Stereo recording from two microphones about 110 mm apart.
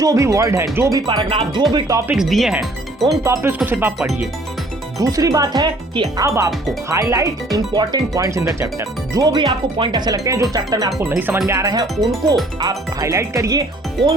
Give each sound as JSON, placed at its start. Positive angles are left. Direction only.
{"t": 0.0, "sound": "speech", "side_deg": -30}
{"t": 1.0, "sound": "speech", "side_deg": -50}
{"t": 1.7, "sound": "speech", "side_deg": -30}
{"t": 2.1, "sound": "speech", "side_deg": -5}
{"t": 3.2, "sound": "speech", "side_deg": -25}
{"t": 4.9, "sound": "speech", "side_deg": -30}
{"t": 6.2, "sound": "speech", "side_deg": -30}
{"t": 9.4, "sound": "speech", "side_deg": -50}